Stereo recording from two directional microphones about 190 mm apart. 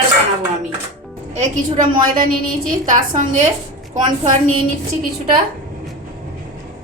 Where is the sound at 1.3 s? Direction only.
35° right (ahead or behind).